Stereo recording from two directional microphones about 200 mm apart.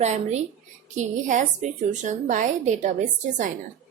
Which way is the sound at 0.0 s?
35° right (ahead or behind).